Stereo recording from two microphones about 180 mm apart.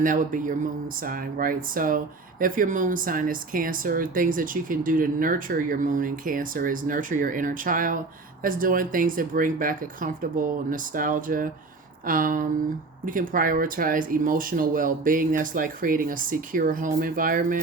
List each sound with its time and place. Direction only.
0.0 s a woman's voice: 45° right (ahead or behind)